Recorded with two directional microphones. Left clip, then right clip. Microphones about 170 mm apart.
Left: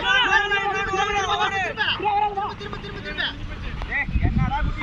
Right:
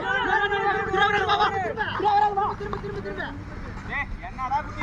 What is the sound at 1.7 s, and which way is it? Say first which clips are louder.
Hubbub: left 4 dB; 90° right.